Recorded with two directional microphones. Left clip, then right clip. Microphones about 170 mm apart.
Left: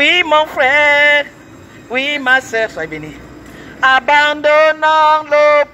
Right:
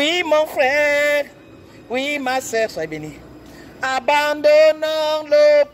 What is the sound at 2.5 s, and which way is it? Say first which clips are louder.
Mantra: left 3 dB; 35° right (ahead or behind).